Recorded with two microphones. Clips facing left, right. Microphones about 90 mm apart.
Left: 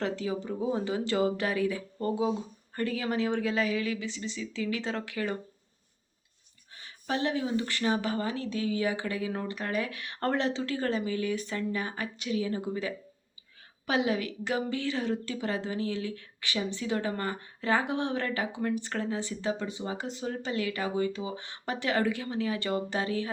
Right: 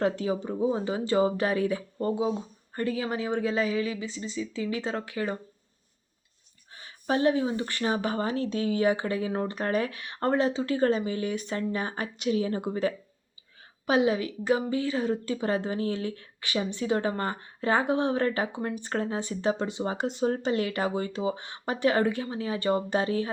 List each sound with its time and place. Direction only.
0.4 s speech: 25° right (ahead or behind)
6.7 s speech: 30° right (ahead or behind)
10.0 s speech: 20° right (ahead or behind)
13.8 s speech: 25° right (ahead or behind)
14.5 s a sound: 15° right (ahead or behind)
14.8 s speech: 40° right (ahead or behind)
20.0 s speech: 55° right (ahead or behind)
20.2 s speech: 35° right (ahead or behind)
22.2 s speech: 25° right (ahead or behind)